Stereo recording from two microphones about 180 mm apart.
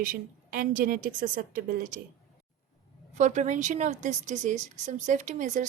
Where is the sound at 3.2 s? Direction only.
45° right (ahead or behind).